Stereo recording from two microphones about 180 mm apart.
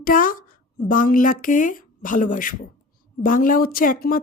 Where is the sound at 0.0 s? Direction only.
50° left (ahead or behind).